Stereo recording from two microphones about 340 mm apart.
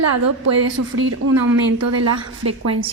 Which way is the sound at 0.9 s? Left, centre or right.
Right.